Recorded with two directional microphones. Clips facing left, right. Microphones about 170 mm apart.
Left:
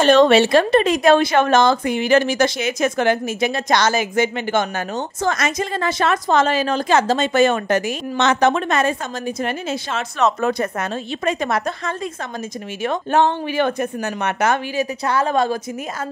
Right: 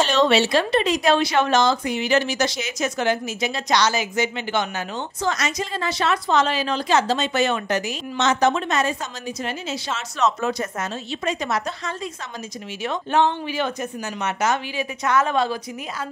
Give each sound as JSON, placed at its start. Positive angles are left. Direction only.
{"t": 0.0, "sound": "speech", "side_deg": 50}
{"t": 14.8, "sound": "speech", "side_deg": 35}